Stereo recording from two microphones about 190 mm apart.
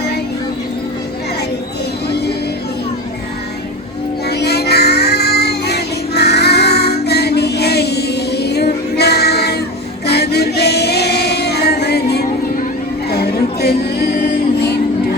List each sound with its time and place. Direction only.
2.0 s music: 60° left (ahead or behind)
4.3 s child singing: 60° left (ahead or behind)
10.1 s female singing: 60° left (ahead or behind)
13.1 s music: 55° left (ahead or behind)